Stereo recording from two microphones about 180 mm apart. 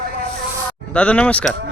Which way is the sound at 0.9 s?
5° left (ahead or behind).